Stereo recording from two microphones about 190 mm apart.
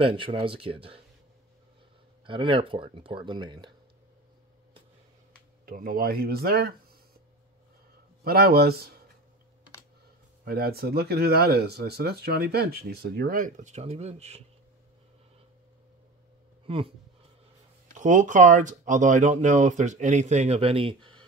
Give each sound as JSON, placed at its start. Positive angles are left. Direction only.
{"t": 0.0, "sound": "speech", "side_deg": -25}
{"t": 2.2, "sound": "speech", "side_deg": -25}
{"t": 5.7, "sound": "speech", "side_deg": -50}
{"t": 8.2, "sound": "speech", "side_deg": -55}
{"t": 10.4, "sound": "speech", "side_deg": -55}
{"t": 16.6, "sound": "speech", "side_deg": -30}
{"t": 17.9, "sound": "speech", "side_deg": -40}